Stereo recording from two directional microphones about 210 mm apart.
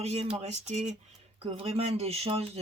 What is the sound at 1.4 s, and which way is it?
Speech, 30° right (ahead or behind).